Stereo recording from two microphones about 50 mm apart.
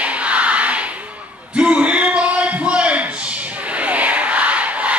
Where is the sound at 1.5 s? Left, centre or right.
Right.